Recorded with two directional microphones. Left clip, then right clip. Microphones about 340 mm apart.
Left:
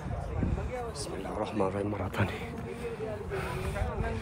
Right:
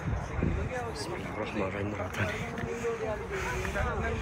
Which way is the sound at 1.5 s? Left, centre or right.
Centre.